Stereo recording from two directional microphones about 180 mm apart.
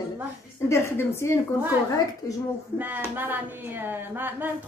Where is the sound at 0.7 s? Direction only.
15° left (ahead or behind).